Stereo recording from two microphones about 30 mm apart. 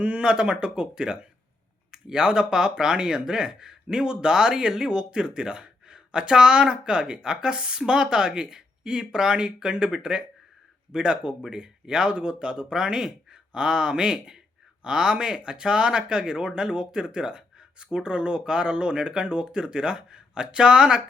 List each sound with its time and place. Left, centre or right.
0.2 s speech: right